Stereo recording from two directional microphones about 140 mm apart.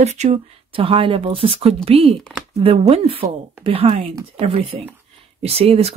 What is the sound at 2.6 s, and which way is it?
A woman's voice, 45° right (ahead or behind).